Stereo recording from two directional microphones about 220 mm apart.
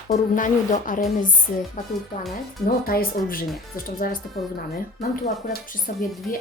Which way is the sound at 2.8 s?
40° left (ahead or behind).